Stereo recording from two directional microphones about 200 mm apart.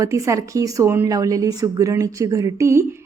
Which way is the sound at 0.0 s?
15° right (ahead or behind).